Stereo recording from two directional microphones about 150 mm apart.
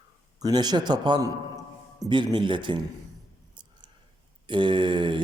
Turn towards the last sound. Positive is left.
turn(degrees=-35)  # may be behind; listen again after turning